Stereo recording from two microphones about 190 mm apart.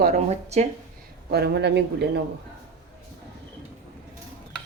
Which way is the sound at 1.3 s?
60° right (ahead or behind).